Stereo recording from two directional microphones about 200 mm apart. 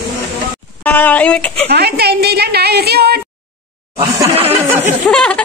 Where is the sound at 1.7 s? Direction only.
50° right (ahead or behind).